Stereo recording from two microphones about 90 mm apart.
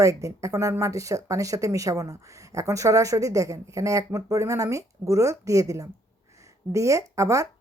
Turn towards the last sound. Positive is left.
turn(degrees=-35)  # may be behind; listen again after turning